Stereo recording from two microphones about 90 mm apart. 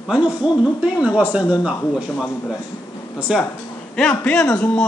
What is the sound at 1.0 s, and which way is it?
Speech, 15° right (ahead or behind).